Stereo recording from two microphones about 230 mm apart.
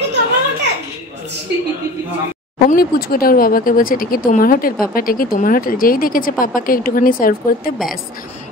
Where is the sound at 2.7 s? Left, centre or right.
Left.